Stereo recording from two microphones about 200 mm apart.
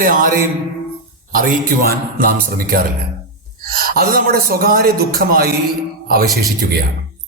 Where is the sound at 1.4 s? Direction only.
45° right (ahead or behind).